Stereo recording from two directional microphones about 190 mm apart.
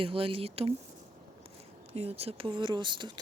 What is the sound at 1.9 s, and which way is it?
Speech, 35° right (ahead or behind).